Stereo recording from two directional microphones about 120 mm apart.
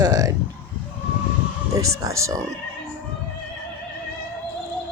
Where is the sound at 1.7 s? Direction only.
25° right (ahead or behind).